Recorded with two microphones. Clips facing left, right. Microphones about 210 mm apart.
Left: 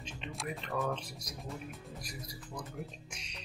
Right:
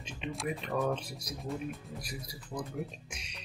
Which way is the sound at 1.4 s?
Centre (ahead or behind).